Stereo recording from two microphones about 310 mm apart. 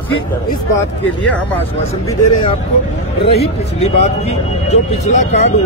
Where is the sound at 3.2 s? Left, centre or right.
Centre.